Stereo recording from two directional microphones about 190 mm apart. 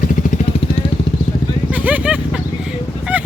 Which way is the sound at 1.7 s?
10° right (ahead or behind).